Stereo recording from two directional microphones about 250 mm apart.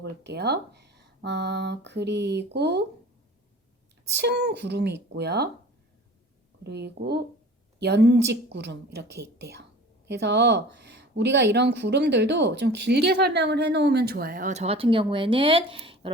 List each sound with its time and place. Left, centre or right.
0.0 s speech: right
4.1 s speech: right
6.7 s speech: right